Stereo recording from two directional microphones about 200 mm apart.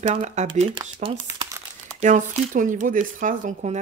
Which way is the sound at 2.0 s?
40° right (ahead or behind).